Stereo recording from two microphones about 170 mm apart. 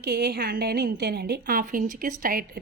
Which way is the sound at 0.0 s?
70° right (ahead or behind).